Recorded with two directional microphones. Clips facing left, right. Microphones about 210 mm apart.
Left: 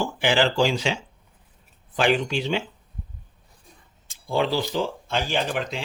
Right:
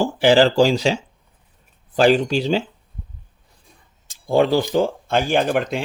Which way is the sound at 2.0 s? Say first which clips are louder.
Right 7 dB; 40° right (ahead or behind).